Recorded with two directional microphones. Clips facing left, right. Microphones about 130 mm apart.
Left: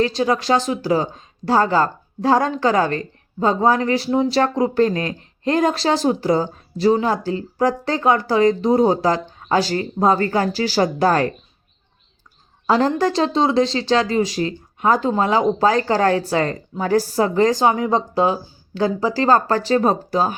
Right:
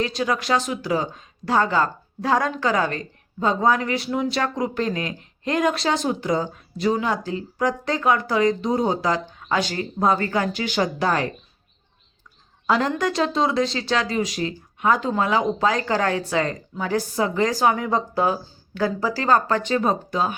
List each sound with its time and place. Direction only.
0.0 s speech: 30° left (ahead or behind)
12.6 s speech: 30° left (ahead or behind)